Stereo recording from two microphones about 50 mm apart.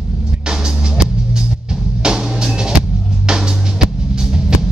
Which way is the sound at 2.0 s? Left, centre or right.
Centre.